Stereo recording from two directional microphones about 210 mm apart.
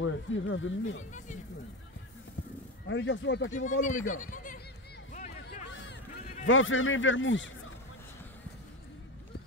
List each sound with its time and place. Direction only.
0.0 s speech: 65° left (ahead or behind)
1.1 s speech: 35° left (ahead or behind)
2.9 s speech: 60° left (ahead or behind)
3.8 s speech: 40° left (ahead or behind)
5.1 s a sound: 35° left (ahead or behind)
6.4 s speech: 70° left (ahead or behind)